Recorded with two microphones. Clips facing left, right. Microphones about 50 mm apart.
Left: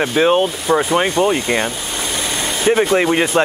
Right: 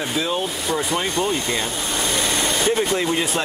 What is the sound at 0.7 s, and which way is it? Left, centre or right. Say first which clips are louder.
Speech: left 8 dB; left.